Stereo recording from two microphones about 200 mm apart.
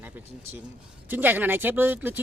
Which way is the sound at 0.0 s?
10° right (ahead or behind).